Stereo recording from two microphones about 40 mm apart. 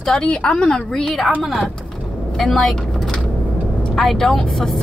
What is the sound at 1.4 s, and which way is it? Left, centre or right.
Speech, centre.